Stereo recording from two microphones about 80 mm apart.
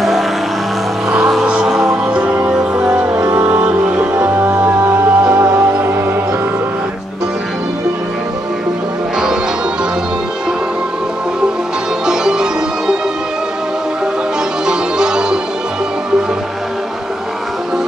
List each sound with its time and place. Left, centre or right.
1.1 s music: centre; by 5.9 s right
12.1 s music: centre
14.7 s music: centre